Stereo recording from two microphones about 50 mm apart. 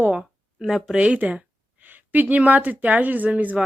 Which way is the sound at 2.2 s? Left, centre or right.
Right.